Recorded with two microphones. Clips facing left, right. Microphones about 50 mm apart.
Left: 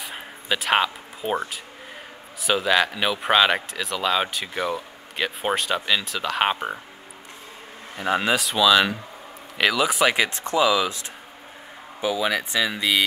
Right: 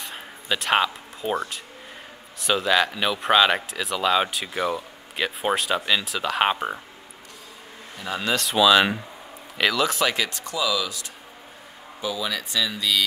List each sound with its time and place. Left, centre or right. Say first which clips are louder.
0.0 s a sound: left 1 dB; centre
2.4 s speech: left 1 dB; centre
8.0 s speech: left 7 dB; left
8.4 s speech: right 4 dB; centre
9.6 s speech: left 2 dB; centre; by 13.0 s left